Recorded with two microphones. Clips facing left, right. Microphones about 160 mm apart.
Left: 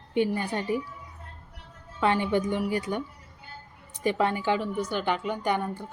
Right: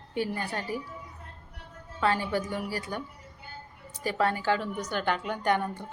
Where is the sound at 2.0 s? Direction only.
20° left (ahead or behind).